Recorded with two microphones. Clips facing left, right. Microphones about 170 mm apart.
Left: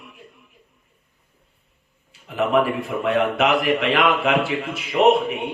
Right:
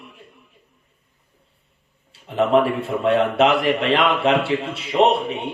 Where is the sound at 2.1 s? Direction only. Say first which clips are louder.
Right 3 dB; 30° right (ahead or behind).